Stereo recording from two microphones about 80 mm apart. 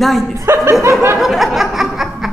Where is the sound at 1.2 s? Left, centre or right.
Centre.